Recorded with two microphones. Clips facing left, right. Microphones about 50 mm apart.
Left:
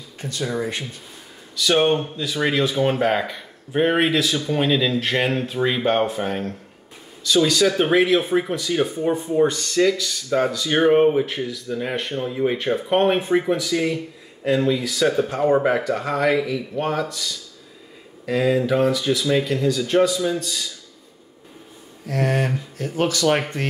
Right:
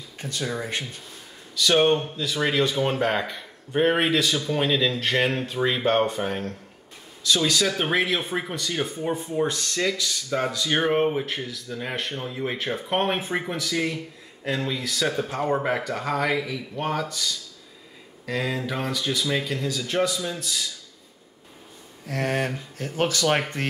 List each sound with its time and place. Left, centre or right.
0.4 s speech: centre